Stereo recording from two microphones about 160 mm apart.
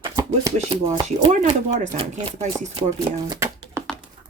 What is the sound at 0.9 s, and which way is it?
Speech, 30° right (ahead or behind).